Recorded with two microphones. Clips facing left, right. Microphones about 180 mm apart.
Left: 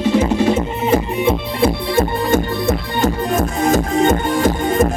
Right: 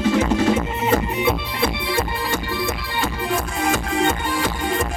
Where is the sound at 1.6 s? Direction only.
45° left (ahead or behind).